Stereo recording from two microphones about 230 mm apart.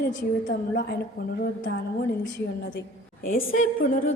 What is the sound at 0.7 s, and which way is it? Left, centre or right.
Speech, left.